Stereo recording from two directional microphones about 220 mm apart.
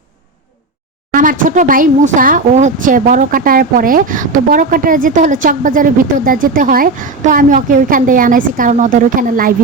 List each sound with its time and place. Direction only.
1.1 s speech: 40° right (ahead or behind)